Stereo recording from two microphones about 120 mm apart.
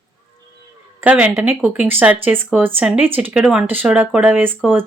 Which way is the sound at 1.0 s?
10° right (ahead or behind).